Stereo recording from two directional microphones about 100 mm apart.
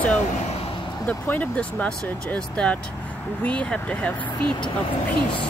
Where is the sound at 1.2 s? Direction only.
15° left (ahead or behind).